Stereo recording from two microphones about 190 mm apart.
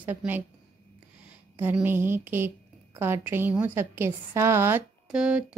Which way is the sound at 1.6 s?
10° right (ahead or behind).